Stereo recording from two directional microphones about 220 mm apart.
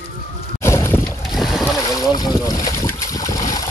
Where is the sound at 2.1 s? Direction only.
20° left (ahead or behind).